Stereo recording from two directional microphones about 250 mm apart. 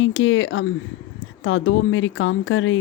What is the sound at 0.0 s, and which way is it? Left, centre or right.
Speech, left.